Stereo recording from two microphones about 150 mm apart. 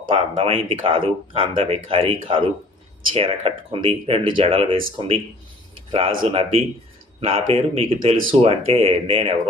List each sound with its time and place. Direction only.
0.1 s speech: 35° right (ahead or behind)